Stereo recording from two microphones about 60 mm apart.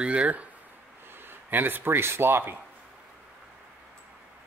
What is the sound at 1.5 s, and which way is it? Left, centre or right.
Speech, right.